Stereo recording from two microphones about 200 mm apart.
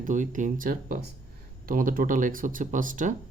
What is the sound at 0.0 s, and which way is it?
Speech, 40° right (ahead or behind).